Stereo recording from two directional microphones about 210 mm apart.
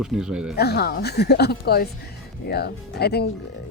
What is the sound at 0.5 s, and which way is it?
Speech, 50° left (ahead or behind).